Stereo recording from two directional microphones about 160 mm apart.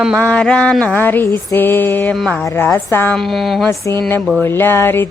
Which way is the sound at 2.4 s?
15° left (ahead or behind).